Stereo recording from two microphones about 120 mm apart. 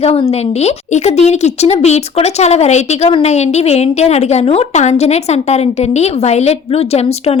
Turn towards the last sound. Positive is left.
turn(degrees=60)  # may be behind; listen again after turning